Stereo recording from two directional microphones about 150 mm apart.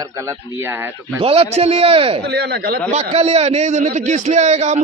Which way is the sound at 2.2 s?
90° right.